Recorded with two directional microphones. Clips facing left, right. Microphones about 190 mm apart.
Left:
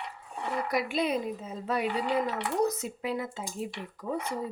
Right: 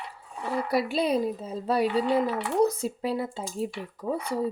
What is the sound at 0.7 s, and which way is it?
Speech, 30° right (ahead or behind).